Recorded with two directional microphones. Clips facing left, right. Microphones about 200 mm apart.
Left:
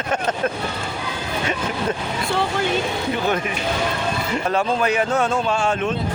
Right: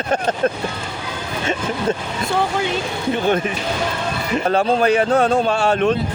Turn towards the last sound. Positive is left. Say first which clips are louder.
# right 4 dB
turn(degrees=-40)  # may be behind; listen again after turning